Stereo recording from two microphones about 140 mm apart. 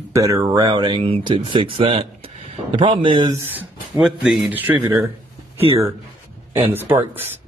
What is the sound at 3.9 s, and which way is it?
Speech, centre (ahead or behind).